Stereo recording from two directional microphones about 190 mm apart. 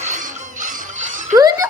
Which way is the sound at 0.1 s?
40° right (ahead or behind).